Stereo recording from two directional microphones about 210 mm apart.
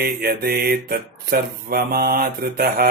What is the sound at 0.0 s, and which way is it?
Mantra, 45° right (ahead or behind).